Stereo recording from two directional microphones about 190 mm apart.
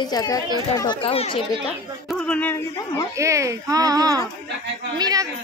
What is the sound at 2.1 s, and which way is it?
Speech, 5° left (ahead or behind).